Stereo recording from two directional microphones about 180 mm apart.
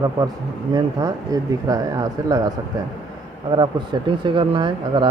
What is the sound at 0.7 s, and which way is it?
Speech, 20° right (ahead or behind).